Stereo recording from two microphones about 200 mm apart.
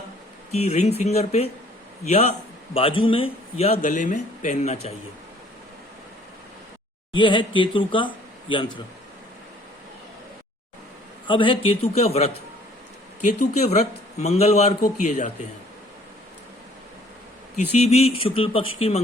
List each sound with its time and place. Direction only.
0.5 s a man's voice: 35° left (ahead or behind)
7.1 s speech: 25° left (ahead or behind)
11.3 s a man's voice: 25° left (ahead or behind)
17.7 s a man's voice: 30° left (ahead or behind)